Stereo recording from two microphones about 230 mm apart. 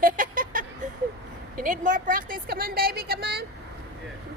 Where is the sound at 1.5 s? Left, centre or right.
Right.